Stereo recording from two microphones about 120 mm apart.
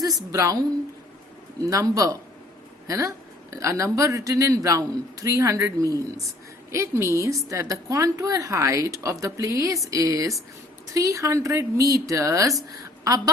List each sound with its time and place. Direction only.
0.2 s a woman's voice: 30° right (ahead or behind)
1.6 s a woman's voice: 30° right (ahead or behind)